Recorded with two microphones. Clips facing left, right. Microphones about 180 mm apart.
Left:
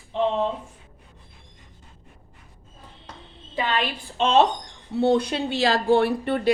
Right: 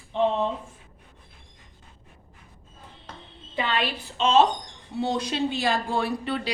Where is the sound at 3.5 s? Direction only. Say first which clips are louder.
Left 1 dB; 45° left (ahead or behind).